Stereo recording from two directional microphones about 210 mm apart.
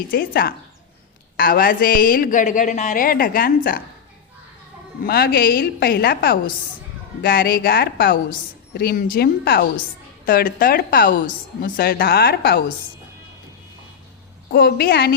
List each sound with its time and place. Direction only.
0.1 s a woman's voice: 45° left (ahead or behind)
5.0 s a woman's voice: 50° left (ahead or behind)
14.5 s a woman's voice: 45° left (ahead or behind)